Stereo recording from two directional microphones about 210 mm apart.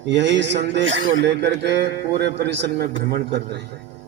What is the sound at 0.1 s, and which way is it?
A man's voice, 55° right (ahead or behind).